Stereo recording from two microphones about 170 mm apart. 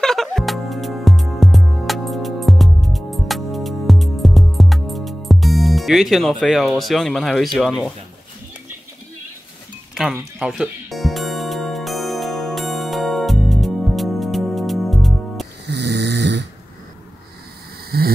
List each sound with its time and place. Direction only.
0.0 s music: centre (ahead or behind)
7.5 s speech: centre (ahead or behind)
9.9 s music: 5° right (ahead or behind)
15.6 s snoring: 80° right
17.9 s vehicle: 65° right (ahead or behind)